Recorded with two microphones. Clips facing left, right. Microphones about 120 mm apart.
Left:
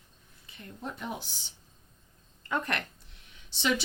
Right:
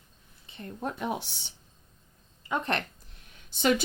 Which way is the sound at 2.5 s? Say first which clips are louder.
Right 2 dB; 25° right (ahead or behind).